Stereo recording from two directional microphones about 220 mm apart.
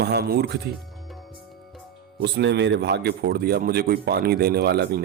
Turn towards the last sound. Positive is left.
turn(degrees=-45)  # may be behind; listen again after turning